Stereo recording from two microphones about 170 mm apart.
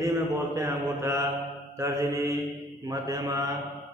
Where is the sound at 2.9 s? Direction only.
20° right (ahead or behind).